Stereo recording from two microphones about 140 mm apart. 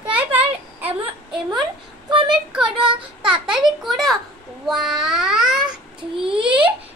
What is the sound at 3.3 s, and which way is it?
Child singing, 5° right (ahead or behind).